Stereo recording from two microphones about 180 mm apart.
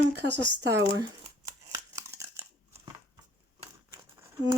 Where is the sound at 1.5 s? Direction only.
15° right (ahead or behind).